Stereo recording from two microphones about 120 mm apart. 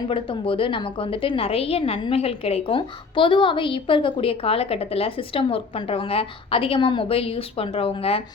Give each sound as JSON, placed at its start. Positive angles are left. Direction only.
{"t": 0.1, "sound": "a woman's voice", "side_deg": 45}